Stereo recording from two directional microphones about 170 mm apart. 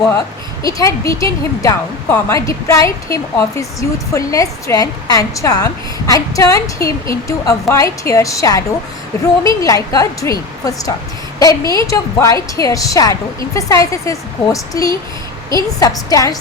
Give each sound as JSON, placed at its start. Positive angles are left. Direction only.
{"t": 0.6, "sound": "a woman's voice", "side_deg": 20}